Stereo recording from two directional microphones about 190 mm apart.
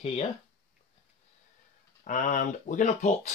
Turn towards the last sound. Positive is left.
turn(degrees=35)  # may be behind; listen again after turning